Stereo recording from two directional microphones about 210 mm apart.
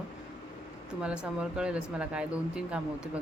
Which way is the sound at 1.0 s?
5° right (ahead or behind).